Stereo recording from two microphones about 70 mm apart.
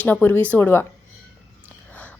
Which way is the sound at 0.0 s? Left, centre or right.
Left.